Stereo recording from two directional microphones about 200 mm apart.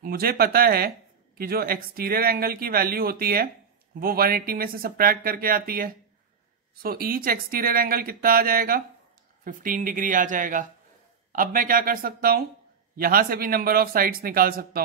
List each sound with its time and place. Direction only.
0.0 s speech: 50° right (ahead or behind)